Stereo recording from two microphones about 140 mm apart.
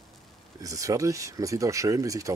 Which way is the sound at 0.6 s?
25° right (ahead or behind).